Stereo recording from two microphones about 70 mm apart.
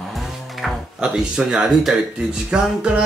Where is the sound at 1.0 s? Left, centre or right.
Centre.